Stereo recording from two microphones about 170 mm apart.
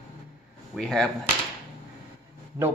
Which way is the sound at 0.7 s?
5° left (ahead or behind).